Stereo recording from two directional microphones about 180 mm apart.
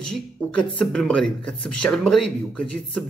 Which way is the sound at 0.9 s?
5° left (ahead or behind).